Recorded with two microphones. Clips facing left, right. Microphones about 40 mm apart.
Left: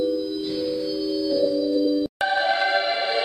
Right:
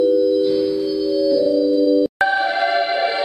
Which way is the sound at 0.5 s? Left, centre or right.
Right.